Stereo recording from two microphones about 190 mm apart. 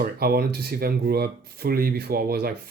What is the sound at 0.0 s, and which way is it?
Speech, 55° right (ahead or behind).